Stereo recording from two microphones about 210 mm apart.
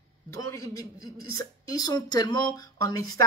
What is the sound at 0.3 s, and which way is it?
Speech, 15° left (ahead or behind).